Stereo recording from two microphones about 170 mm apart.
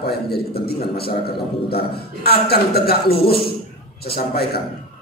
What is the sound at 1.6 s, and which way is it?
A man's voice, 65° left (ahead or behind).